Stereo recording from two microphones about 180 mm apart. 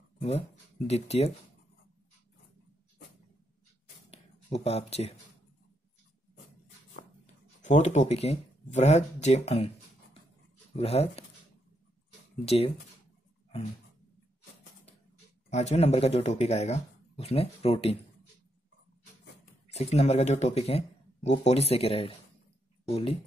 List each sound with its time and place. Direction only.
0.2 s speech: 35° left (ahead or behind)
4.1 s a sound: 35° left (ahead or behind)
7.6 s speech: 40° left (ahead or behind)
10.8 s speech: 35° left (ahead or behind)
12.4 s speech: 35° left (ahead or behind)
15.5 s speech: 35° left (ahead or behind)
19.7 s speech: 35° left (ahead or behind)